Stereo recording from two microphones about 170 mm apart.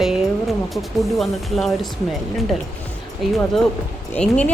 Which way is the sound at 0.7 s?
Centre (ahead or behind).